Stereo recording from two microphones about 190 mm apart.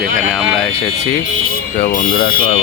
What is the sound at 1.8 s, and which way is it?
Speech, 45° left (ahead or behind).